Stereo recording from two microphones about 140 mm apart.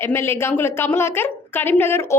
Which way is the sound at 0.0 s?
15° left (ahead or behind).